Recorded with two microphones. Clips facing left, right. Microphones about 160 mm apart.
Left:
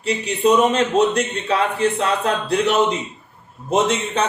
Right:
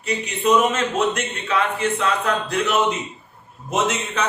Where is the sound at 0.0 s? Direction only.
35° left (ahead or behind).